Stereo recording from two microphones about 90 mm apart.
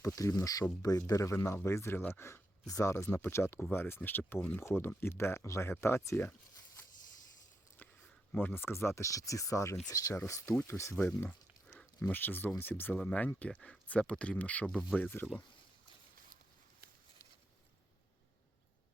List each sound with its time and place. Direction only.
0.0 s speech: 35° left (ahead or behind)
2.6 s speech: 40° left (ahead or behind)
2.9 s speech: 30° left (ahead or behind)
8.3 s speech: 20° left (ahead or behind)
10.9 s speech: 15° left (ahead or behind)
12.9 s speech: 10° left (ahead or behind)
14.9 s speech: 20° left (ahead or behind)